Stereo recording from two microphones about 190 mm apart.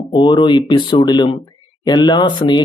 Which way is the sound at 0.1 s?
25° left (ahead or behind).